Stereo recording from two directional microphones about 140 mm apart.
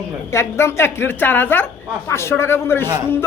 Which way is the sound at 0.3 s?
20° left (ahead or behind).